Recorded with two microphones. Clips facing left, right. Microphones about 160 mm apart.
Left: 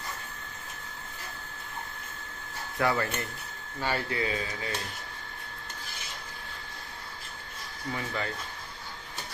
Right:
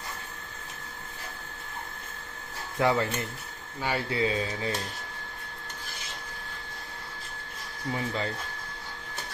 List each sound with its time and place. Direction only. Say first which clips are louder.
2.8 s speech: right 3 dB; 20° right (ahead or behind)
7.9 s speech: right 3 dB; 25° right (ahead or behind)